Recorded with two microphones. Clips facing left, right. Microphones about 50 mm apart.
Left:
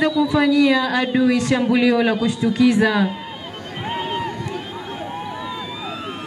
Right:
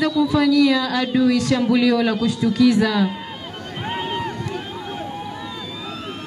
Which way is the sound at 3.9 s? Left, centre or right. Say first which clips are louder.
Left 1 dB; centre.